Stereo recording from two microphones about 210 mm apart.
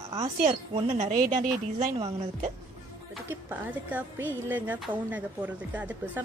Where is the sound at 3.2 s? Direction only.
10° right (ahead or behind).